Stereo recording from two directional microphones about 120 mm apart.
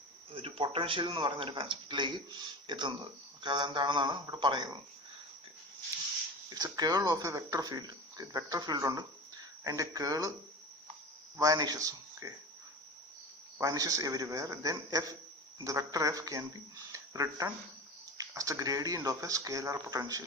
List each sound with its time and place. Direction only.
0.3 s speech: 50° right (ahead or behind)
6.5 s speech: 30° right (ahead or behind)
11.3 s speech: 30° right (ahead or behind)
13.6 s speech: 30° right (ahead or behind)